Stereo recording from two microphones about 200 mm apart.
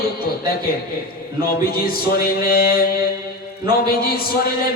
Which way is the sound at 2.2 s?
50° left (ahead or behind).